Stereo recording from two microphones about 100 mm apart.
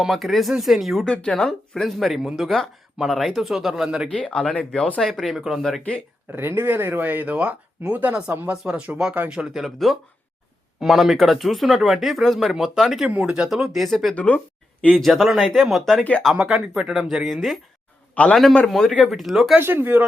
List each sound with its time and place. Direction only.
0.0 s speech: centre (ahead or behind)
1.0 s speech: 10° left (ahead or behind); by 4.1 s 10° right (ahead or behind)
4.1 s speech: 10° left (ahead or behind)
6.3 s speech: 25° right (ahead or behind)
8.6 s speech: 10° right (ahead or behind)
14.2 s speech: 15° left (ahead or behind)
18.1 s a man's voice: 10° left (ahead or behind)
19.5 s speech: 20° right (ahead or behind)